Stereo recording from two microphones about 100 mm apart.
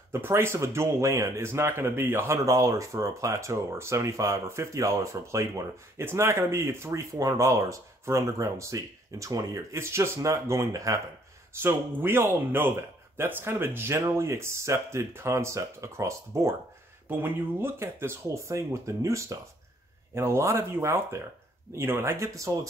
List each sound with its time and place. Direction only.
0.1 s speech: 25° right (ahead or behind)
11.5 s speech: 25° right (ahead or behind)